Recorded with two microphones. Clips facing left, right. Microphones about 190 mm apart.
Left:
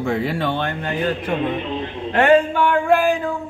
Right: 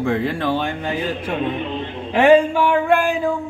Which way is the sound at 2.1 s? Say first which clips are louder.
Right 2 dB; 10° right (ahead or behind).